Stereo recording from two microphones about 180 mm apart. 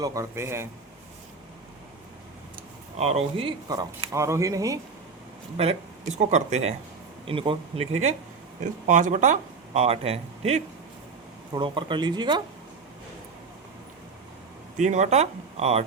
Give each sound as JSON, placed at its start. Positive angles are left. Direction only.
{"t": 0.0, "sound": "a man's voice", "side_deg": -20}
{"t": 3.0, "sound": "a man's voice", "side_deg": -35}
{"t": 5.5, "sound": "speech", "side_deg": -35}
{"t": 8.6, "sound": "speech", "side_deg": -45}
{"t": 14.8, "sound": "speech", "side_deg": -40}